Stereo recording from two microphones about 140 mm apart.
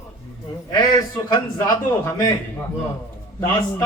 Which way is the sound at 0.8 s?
30° left (ahead or behind).